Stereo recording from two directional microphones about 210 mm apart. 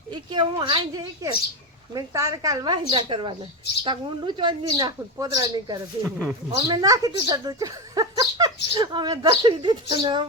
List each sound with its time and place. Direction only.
0.1 s a woman's voice: 20° right (ahead or behind)
6.0 s speech: 5° right (ahead or behind)
6.6 s a woman's voice: 20° right (ahead or behind)